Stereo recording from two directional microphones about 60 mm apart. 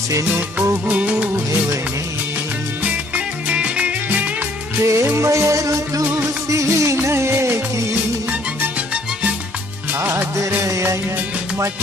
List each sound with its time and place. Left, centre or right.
0.8 s music: right
2.8 s music: right
4.8 s music: right
6.0 s music: right
6.5 s music: right
9.9 s music: right